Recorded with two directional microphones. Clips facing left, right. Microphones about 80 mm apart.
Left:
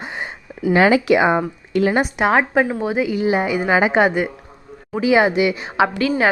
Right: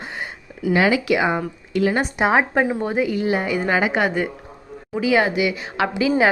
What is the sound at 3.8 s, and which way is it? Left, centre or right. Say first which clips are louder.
Speech: left 4 dB; left.